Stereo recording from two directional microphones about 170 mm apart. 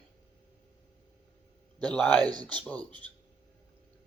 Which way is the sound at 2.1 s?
25° right (ahead or behind).